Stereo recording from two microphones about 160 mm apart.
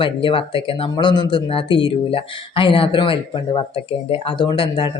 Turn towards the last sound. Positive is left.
turn(degrees=30)  # may be behind; listen again after turning